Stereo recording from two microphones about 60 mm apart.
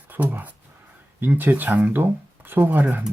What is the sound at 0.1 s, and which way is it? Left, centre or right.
Speech, right.